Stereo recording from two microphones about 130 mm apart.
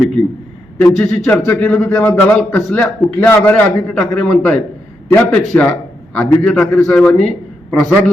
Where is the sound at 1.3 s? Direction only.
10° left (ahead or behind).